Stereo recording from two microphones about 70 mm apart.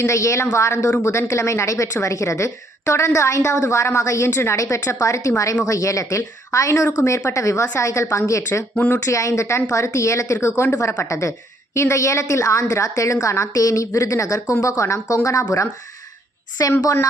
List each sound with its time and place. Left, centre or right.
0.0 s a woman's voice: left
16.6 s a woman's voice: left